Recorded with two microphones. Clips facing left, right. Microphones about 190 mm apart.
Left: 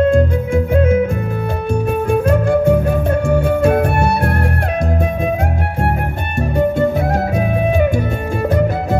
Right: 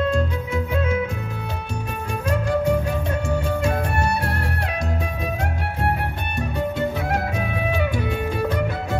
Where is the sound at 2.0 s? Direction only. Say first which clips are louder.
Left 8 dB; 55° left (ahead or behind).